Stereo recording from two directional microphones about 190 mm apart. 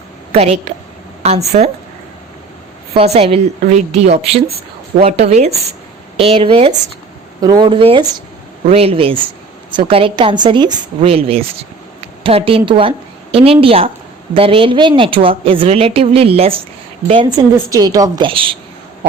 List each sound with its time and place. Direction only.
0.3 s a woman's voice: 35° right (ahead or behind)
2.9 s a woman's voice: 30° right (ahead or behind)